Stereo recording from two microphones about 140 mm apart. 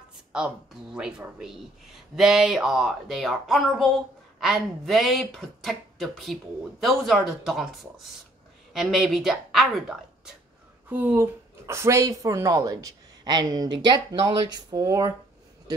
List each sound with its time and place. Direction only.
0.3 s a woman's voice: 5° right (ahead or behind)
10.9 s speech: 15° right (ahead or behind)